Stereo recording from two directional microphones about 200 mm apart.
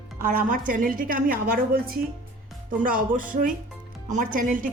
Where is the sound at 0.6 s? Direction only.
45° right (ahead or behind).